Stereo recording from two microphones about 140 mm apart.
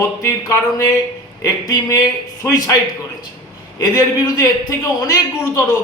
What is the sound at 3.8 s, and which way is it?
Speech, 25° left (ahead or behind).